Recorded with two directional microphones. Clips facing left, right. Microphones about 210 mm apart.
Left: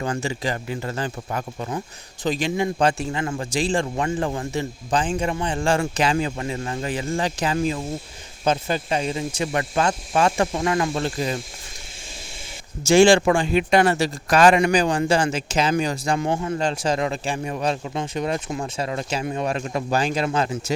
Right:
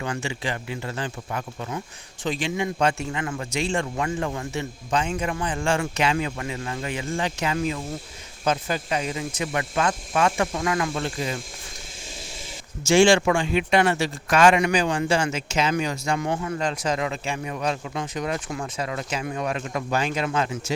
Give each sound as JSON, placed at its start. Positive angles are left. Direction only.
{"t": 0.0, "sound": "speech", "side_deg": 40}
{"t": 12.9, "sound": "speech", "side_deg": 35}